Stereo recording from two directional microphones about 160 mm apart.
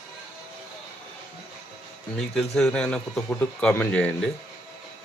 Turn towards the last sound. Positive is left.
turn(degrees=10)  # may be behind; listen again after turning